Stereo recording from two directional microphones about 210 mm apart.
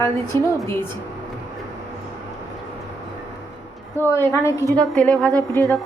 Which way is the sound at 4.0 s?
10° left (ahead or behind).